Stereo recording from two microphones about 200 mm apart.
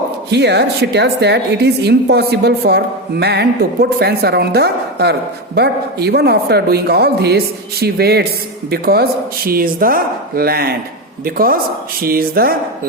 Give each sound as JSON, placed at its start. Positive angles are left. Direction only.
{"t": 0.3, "sound": "a woman's voice", "side_deg": -55}